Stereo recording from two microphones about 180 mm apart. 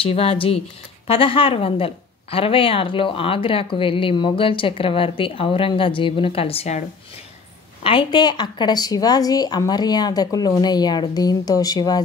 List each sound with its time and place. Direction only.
0.0 s a woman's voice: 30° left (ahead or behind)
7.8 s speech: 25° left (ahead or behind)